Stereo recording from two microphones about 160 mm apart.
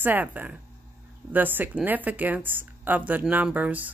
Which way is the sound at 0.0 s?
10° right (ahead or behind).